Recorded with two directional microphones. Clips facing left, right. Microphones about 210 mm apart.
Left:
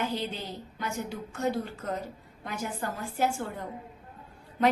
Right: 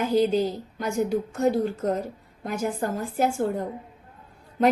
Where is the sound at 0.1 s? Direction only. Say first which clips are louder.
Right 13 dB; 45° right (ahead or behind).